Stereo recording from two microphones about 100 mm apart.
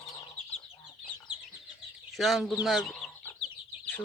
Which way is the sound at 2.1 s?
Centre (ahead or behind).